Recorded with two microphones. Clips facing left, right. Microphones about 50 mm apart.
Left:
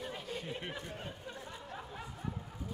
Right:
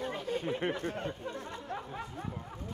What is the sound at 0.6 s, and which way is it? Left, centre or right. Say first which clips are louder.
Speech: right 9 dB; right.